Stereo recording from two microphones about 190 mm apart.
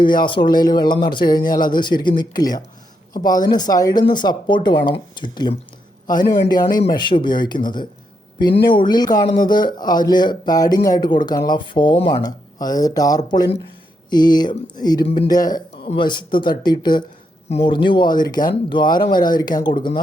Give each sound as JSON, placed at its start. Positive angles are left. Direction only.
{"t": 0.3, "sound": "speech", "side_deg": 25}
{"t": 1.4, "sound": "a man's voice", "side_deg": 50}
{"t": 1.6, "sound": "speech", "side_deg": 25}
{"t": 6.1, "sound": "a man's voice", "side_deg": 45}
{"t": 6.9, "sound": "speech", "side_deg": 25}